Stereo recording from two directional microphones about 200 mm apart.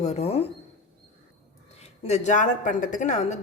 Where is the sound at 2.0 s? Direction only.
35° left (ahead or behind).